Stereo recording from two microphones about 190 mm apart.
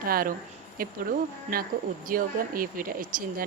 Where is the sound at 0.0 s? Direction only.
50° right (ahead or behind).